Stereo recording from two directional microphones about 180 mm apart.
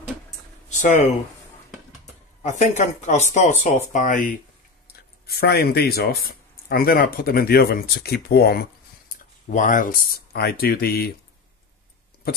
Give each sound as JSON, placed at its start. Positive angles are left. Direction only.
{"t": 0.7, "sound": "speech", "side_deg": 40}
{"t": 2.4, "sound": "speech", "side_deg": 40}
{"t": 4.8, "sound": "speech", "side_deg": 60}
{"t": 9.1, "sound": "speech", "side_deg": 45}